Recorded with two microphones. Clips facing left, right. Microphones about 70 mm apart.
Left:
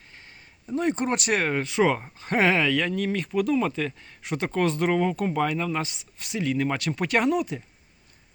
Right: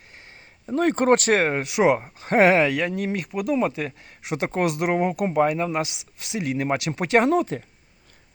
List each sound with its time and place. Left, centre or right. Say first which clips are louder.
0.7 s speech: right 6 dB; right
1.4 s speech: right 3 dB; right
1.6 s speech: right 3 dB; centre
7.3 s speech: right 3 dB; right